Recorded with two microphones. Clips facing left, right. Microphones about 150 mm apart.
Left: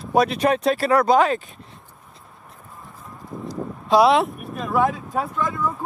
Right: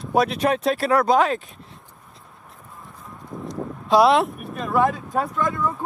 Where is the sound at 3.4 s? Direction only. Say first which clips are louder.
Even; centre (ahead or behind).